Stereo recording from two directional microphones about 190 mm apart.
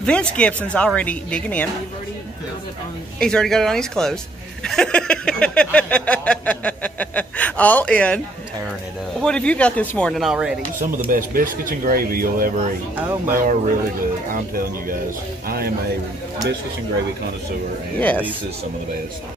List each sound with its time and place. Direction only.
0.0 s a sound: 5° left (ahead or behind)
3.2 s speech: 5° left (ahead or behind)
4.6 s a sound: 5° left (ahead or behind)
9.2 s speech: 5° left (ahead or behind)
11.1 s speech: 45° right (ahead or behind)
13.0 s speech: 15° right (ahead or behind)
13.3 s speech: 45° right (ahead or behind)
15.4 s a man's voice: 50° right (ahead or behind)
17.9 s a sound: 10° left (ahead or behind)